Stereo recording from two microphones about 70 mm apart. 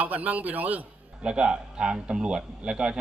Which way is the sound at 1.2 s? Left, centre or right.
Centre.